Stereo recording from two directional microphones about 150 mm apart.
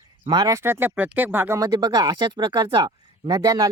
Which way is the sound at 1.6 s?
25° right (ahead or behind).